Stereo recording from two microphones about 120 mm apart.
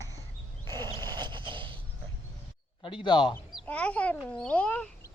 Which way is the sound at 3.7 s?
10° left (ahead or behind).